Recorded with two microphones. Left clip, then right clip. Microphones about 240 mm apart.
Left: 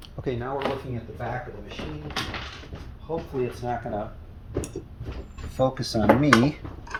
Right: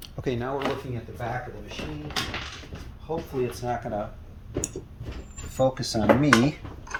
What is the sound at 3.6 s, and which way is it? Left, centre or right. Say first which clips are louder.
Speech: even; right.